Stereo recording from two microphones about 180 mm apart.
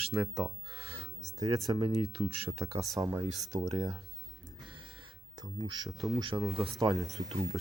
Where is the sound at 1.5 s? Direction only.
20° right (ahead or behind).